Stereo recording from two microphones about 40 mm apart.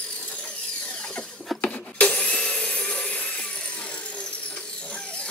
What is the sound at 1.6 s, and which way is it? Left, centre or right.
Wood, left.